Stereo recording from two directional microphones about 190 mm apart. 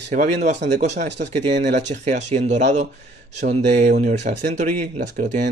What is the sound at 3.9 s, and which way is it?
Speech, 50° right (ahead or behind).